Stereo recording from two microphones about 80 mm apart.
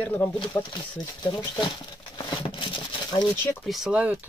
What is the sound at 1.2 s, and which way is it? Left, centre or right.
Speech, left.